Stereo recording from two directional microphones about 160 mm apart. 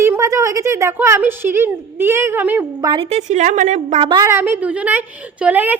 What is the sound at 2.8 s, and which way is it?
A woman's voice, 35° right (ahead or behind).